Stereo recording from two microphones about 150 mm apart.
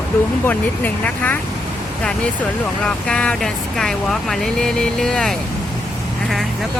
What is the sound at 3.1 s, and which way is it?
Speech, 5° left (ahead or behind).